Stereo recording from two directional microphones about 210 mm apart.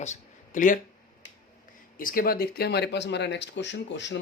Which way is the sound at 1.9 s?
40° left (ahead or behind).